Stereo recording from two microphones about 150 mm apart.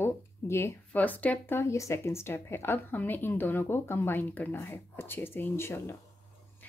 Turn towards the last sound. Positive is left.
turn(degrees=15)  # may be behind; listen again after turning